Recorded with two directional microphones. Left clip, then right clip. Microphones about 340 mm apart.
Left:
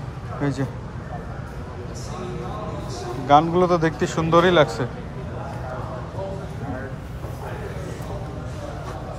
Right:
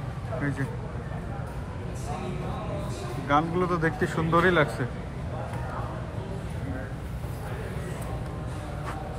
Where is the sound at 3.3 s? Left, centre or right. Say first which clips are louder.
Left 9 dB; centre.